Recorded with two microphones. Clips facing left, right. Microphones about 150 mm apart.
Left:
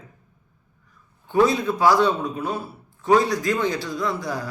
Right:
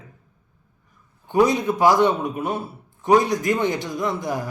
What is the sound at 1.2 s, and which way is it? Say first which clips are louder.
A man's voice: right 1 dB; 20° right (ahead or behind).